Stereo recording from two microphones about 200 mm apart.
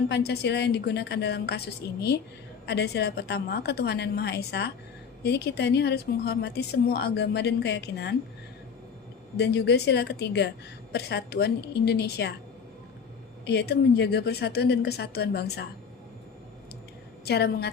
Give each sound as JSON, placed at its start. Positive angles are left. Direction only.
{"t": 0.1, "sound": "speech", "side_deg": 55}
{"t": 9.4, "sound": "speech", "side_deg": 55}
{"t": 13.4, "sound": "speech", "side_deg": 55}
{"t": 17.2, "sound": "speech", "side_deg": 55}